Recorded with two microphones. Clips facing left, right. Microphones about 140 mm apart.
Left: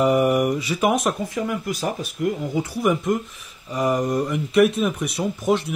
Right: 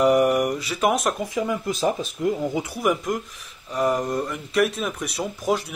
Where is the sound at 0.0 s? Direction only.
5° left (ahead or behind).